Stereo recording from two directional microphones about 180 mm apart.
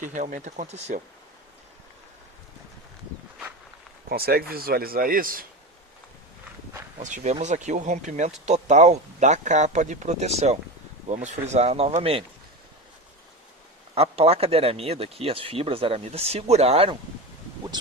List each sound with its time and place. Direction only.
0.0 s speech: 45° right (ahead or behind)
4.1 s speech: 60° right (ahead or behind)
7.0 s speech: 40° right (ahead or behind)
13.9 s speech: 35° right (ahead or behind)